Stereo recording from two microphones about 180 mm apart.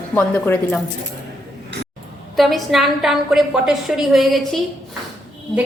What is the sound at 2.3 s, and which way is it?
A woman's voice, centre (ahead or behind).